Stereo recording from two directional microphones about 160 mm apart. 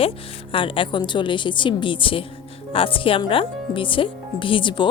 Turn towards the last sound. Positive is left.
turn(degrees=30)  # may be behind; listen again after turning